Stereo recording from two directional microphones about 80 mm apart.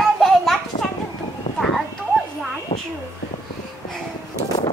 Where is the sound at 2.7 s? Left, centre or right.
Left.